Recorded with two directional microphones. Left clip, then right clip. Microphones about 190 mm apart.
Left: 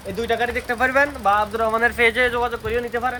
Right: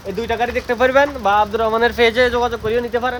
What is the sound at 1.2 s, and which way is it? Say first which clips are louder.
Speech: right 3 dB; 60° right (ahead or behind).